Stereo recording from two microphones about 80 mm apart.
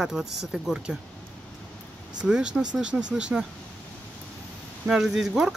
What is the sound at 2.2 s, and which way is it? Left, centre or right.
Speech, centre.